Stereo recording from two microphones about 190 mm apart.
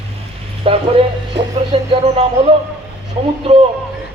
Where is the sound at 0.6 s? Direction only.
30° right (ahead or behind).